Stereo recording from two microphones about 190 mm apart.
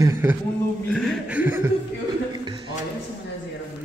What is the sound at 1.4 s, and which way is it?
Chuckle, 10° right (ahead or behind).